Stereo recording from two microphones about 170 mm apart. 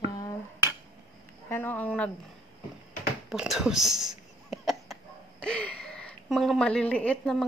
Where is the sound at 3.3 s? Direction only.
Centre (ahead or behind).